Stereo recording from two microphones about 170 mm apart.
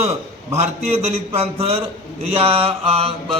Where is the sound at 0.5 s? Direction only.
40° right (ahead or behind).